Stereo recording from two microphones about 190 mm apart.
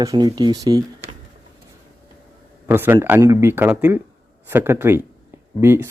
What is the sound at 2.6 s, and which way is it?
Speech, 10° right (ahead or behind).